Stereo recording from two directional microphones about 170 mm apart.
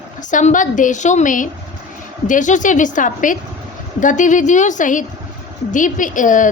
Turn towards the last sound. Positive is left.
turn(degrees=50)  # may be behind; listen again after turning